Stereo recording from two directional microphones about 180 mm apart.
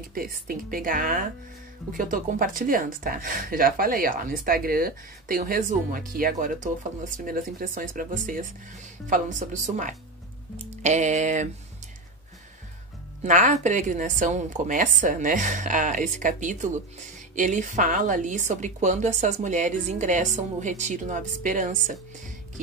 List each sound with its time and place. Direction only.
0.1 s speech: 50° right (ahead or behind)
10.6 s music: 40° right (ahead or behind)
13.2 s speech: 40° right (ahead or behind)